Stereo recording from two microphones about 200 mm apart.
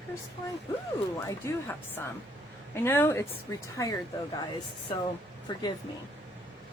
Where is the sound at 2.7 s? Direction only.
10° left (ahead or behind).